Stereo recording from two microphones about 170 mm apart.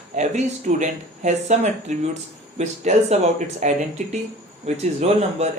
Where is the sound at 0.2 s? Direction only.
45° right (ahead or behind).